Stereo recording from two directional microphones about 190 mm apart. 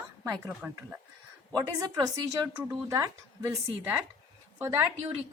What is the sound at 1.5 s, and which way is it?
A woman's voice, 20° right (ahead or behind).